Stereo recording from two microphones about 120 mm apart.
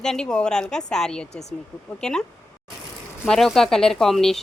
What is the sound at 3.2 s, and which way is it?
Speech, centre (ahead or behind).